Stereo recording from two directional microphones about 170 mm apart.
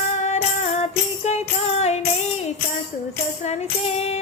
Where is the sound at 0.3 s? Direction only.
40° left (ahead or behind).